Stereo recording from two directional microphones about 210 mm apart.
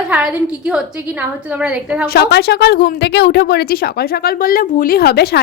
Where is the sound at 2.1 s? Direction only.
50° left (ahead or behind).